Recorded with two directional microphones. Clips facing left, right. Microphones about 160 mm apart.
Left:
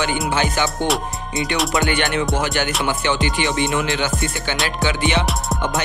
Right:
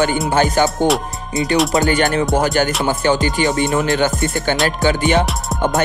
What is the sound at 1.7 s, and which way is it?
Music, 40° right (ahead or behind).